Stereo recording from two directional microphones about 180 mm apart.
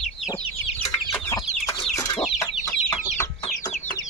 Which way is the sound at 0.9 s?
15° left (ahead or behind).